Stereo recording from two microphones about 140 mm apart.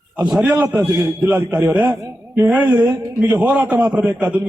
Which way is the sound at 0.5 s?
15° right (ahead or behind).